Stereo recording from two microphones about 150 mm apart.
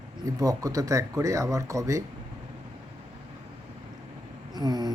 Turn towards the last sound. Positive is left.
turn(degrees=-30)  # may be behind; listen again after turning